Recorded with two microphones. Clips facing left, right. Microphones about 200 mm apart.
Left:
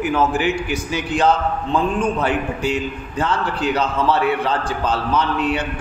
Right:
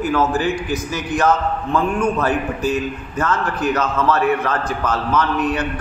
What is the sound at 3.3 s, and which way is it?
A man's voice, 30° left (ahead or behind).